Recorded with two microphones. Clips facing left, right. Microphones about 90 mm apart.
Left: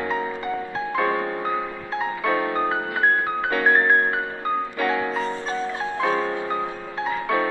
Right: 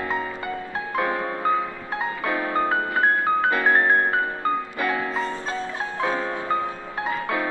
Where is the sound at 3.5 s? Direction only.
20° left (ahead or behind).